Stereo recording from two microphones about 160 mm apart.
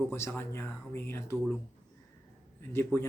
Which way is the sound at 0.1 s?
15° left (ahead or behind).